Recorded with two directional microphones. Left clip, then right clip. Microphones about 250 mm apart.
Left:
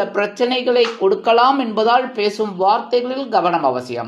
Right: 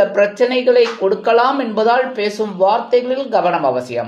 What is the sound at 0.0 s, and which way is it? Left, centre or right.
Speech, left.